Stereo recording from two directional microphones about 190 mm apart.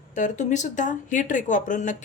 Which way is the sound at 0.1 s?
40° left (ahead or behind).